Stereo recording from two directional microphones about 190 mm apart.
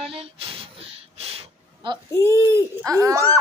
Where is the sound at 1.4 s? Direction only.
25° right (ahead or behind).